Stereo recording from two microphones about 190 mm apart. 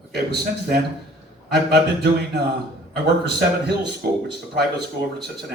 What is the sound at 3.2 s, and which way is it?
Speech, 60° right (ahead or behind).